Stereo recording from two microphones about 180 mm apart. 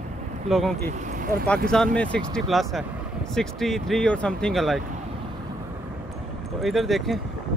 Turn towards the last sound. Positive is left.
turn(degrees=0)  # may be behind; listen again after turning